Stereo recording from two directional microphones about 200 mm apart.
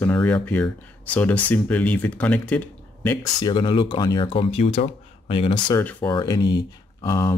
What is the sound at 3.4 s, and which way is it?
Speech, 25° left (ahead or behind).